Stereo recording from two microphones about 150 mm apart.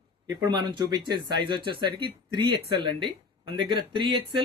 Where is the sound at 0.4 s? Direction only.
30° right (ahead or behind).